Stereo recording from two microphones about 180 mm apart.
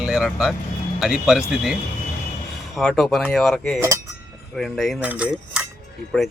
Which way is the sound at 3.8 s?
15° right (ahead or behind).